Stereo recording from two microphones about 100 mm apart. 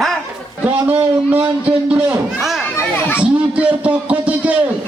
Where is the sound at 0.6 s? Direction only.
20° right (ahead or behind).